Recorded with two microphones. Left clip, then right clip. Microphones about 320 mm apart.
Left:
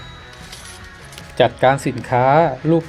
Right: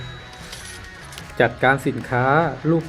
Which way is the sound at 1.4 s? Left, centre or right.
Left.